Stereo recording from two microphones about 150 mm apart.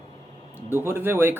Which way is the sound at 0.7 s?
15° right (ahead or behind).